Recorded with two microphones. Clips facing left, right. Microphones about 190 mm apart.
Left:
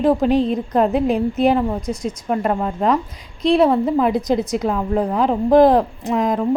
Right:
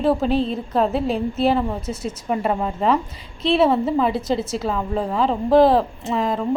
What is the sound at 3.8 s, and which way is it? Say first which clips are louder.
A woman's voice: left 3 dB; 15° left (ahead or behind).